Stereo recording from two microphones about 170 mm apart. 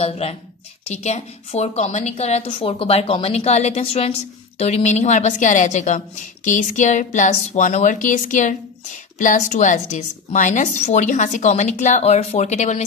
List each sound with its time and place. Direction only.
0.0 s a woman's voice: 35° left (ahead or behind)